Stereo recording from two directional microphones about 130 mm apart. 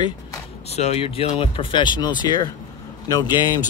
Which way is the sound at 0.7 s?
55° left (ahead or behind).